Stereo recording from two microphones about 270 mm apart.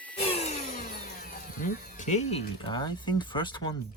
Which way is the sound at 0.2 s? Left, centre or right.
Left.